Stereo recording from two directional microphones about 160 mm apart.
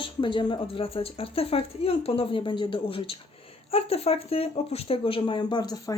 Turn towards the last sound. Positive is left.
turn(degrees=25)  # may be behind; listen again after turning